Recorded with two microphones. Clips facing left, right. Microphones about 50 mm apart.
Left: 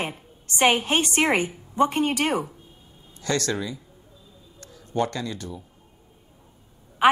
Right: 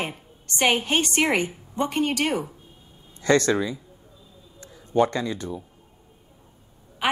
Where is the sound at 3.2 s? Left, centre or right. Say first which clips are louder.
Right 6 dB; right.